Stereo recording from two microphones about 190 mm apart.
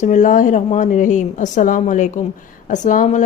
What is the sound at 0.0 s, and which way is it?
Speech, 40° left (ahead or behind).